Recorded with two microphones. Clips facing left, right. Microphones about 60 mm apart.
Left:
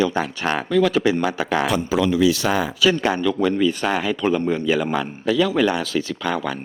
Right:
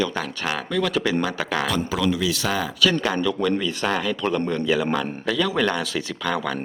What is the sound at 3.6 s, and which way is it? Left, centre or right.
Speech, centre.